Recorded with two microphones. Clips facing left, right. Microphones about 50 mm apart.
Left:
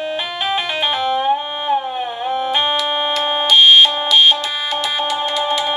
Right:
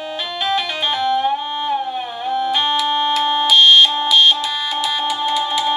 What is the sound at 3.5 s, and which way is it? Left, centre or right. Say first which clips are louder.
Fire alarm: left 1 dB; left.